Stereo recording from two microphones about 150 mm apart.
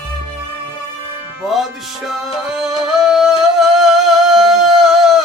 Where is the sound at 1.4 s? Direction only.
Centre (ahead or behind).